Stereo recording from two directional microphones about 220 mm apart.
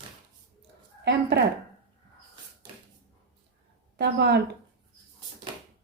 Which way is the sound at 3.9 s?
50° right (ahead or behind).